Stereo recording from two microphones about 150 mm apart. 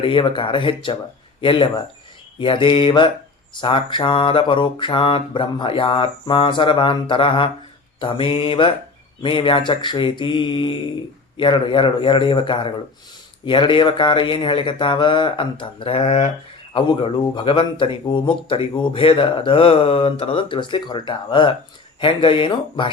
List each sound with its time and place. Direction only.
0.0 s a man's voice: 35° left (ahead or behind)